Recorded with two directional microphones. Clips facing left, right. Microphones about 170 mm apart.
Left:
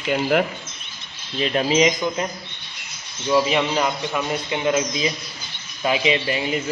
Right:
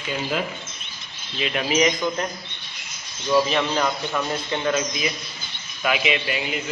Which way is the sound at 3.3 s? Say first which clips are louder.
Left 1 dB; 10° left (ahead or behind).